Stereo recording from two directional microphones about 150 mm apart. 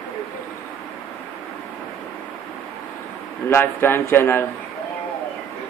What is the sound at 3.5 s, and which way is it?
Speech, 15° left (ahead or behind).